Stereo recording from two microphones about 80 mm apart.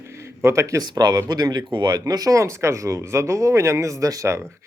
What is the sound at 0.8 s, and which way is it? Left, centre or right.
Speech, right.